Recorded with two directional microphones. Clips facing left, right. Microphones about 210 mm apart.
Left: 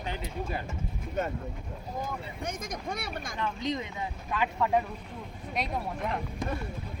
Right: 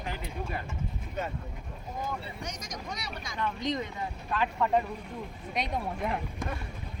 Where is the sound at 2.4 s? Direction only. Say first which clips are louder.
Left 4 dB; 55° left (ahead or behind).